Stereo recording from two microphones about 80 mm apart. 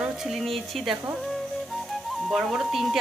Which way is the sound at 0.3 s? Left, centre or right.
Centre.